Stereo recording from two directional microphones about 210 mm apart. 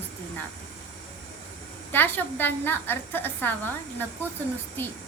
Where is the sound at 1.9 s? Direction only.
10° left (ahead or behind).